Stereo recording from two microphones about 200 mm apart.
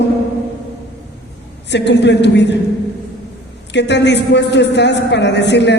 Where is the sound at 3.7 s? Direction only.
60° left (ahead or behind).